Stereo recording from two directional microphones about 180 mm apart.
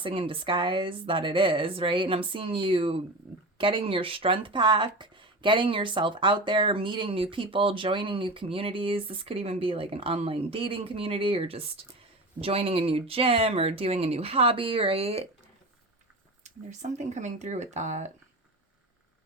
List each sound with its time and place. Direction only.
0.0 s speech: 30° right (ahead or behind)
16.4 s speech: 40° right (ahead or behind)